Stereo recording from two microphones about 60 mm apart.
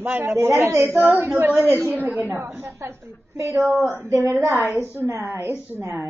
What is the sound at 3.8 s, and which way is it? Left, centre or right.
Speech, right.